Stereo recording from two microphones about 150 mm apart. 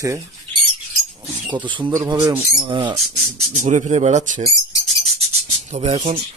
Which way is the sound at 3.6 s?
50° right (ahead or behind).